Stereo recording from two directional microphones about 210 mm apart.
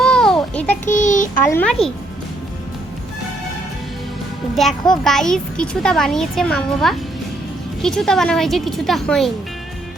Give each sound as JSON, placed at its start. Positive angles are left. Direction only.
{"t": 0.0, "sound": "a sound", "side_deg": 5}
{"t": 0.9, "sound": "child singing", "side_deg": 35}
{"t": 1.4, "sound": "speech", "side_deg": 10}
{"t": 4.6, "sound": "a child's voice", "side_deg": 0}